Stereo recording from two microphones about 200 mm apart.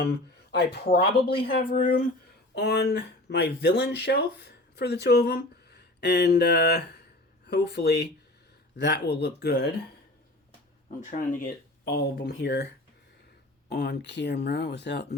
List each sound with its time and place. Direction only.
0.5 s speech: 55° left (ahead or behind)
2.6 s speech: 55° left (ahead or behind)
11.3 s speech: 50° left (ahead or behind)
13.7 s speech: 55° left (ahead or behind)